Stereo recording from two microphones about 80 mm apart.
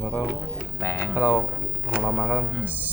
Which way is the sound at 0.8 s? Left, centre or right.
Left.